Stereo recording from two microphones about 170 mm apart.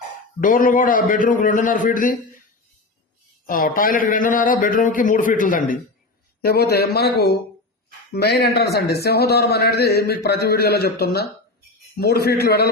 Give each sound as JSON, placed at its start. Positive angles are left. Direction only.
{"t": 0.3, "sound": "a man's voice", "side_deg": 55}
{"t": 3.4, "sound": "a man's voice", "side_deg": 55}
{"t": 6.4, "sound": "a man's voice", "side_deg": 65}